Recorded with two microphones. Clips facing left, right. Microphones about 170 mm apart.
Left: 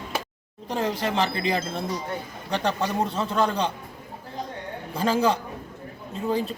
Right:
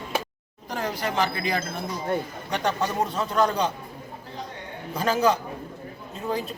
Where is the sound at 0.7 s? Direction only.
25° left (ahead or behind).